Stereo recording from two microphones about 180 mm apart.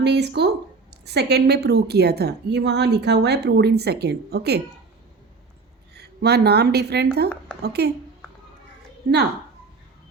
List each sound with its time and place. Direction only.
0.0 s a woman's voice: 65° right (ahead or behind)
6.0 s speech: 65° right (ahead or behind)
9.0 s speech: 55° right (ahead or behind)